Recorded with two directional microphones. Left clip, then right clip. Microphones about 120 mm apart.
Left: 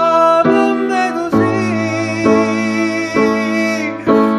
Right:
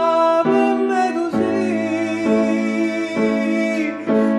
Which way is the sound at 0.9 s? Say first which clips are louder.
Left 4 dB; 15° right (ahead or behind).